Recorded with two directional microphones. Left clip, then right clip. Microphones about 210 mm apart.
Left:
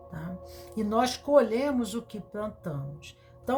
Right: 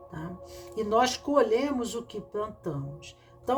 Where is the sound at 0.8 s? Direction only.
10° right (ahead or behind).